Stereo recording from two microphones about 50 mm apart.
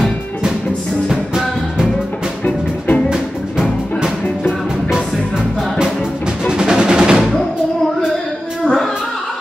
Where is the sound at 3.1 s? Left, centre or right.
Centre.